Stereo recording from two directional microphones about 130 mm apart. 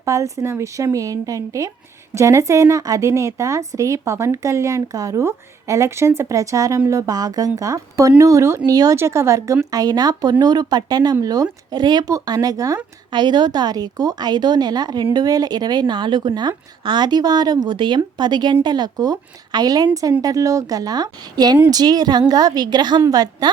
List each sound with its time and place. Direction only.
0.0 s a woman's voice: 25° right (ahead or behind)